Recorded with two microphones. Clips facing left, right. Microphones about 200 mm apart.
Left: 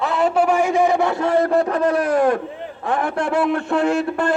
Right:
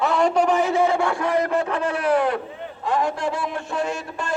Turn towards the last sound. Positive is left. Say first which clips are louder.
# left 9 dB
turn(degrees=60)  # may be behind; listen again after turning